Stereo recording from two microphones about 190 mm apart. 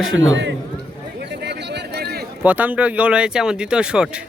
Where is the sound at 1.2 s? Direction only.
60° right (ahead or behind).